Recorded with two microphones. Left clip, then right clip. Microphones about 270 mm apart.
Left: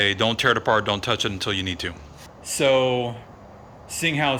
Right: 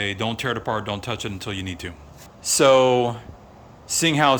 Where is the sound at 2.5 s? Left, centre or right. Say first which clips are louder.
Right 4 dB; right.